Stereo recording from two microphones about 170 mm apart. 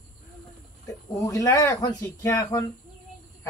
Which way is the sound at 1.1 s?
20° left (ahead or behind).